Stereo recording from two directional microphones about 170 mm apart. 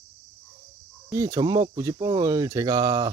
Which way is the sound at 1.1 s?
20° right (ahead or behind).